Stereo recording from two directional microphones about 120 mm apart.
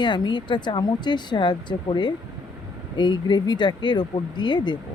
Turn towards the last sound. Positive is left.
turn(degrees=40)  # may be behind; listen again after turning